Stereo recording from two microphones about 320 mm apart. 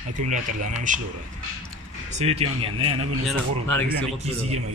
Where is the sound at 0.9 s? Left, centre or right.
Right.